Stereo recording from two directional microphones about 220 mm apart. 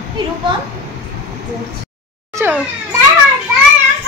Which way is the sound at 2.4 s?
15° right (ahead or behind).